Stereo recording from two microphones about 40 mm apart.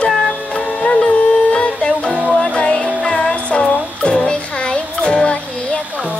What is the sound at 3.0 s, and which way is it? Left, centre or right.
Music, centre.